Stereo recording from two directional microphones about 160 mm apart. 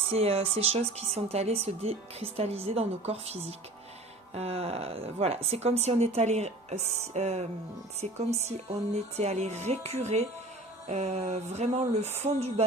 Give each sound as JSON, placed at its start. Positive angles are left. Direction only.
{"t": 0.1, "sound": "a woman's voice", "side_deg": -40}
{"t": 4.4, "sound": "a woman's voice", "side_deg": -40}